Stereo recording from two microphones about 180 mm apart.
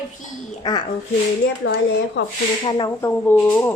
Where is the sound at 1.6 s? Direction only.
75° left (ahead or behind).